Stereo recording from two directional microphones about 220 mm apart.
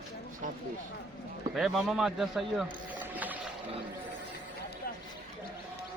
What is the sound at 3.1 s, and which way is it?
Whale vocalization, 5° right (ahead or behind).